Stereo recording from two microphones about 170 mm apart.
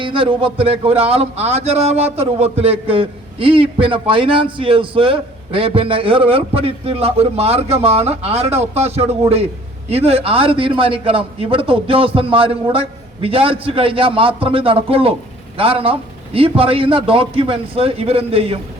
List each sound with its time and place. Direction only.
0.0 s a man's voice: 30° right (ahead or behind)